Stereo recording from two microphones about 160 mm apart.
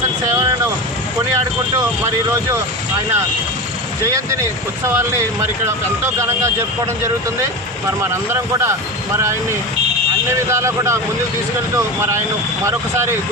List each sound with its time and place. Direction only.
4.9 s speech: 15° right (ahead or behind)
8.1 s speech: 15° right (ahead or behind)
10.5 s speech: 20° right (ahead or behind)
12.6 s speech: 15° right (ahead or behind)